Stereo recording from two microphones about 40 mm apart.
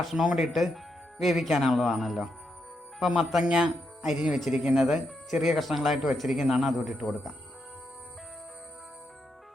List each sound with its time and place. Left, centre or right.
0.3 s speech: centre
3.4 s speech: right
4.0 s speech: centre
6.1 s speech: centre